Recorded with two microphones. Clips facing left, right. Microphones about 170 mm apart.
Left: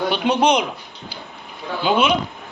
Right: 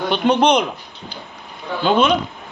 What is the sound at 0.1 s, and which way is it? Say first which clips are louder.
Speech: right 4 dB; 10° left (ahead or behind).